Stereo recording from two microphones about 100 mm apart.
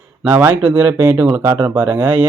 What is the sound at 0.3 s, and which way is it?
Speech, 20° right (ahead or behind).